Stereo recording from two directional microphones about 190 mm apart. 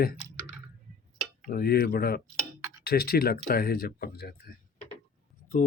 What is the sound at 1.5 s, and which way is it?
Speech, 50° left (ahead or behind).